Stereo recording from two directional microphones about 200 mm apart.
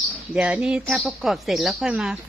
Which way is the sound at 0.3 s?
5° right (ahead or behind).